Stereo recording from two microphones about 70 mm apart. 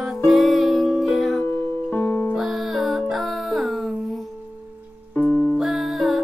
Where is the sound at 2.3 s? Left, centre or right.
Centre.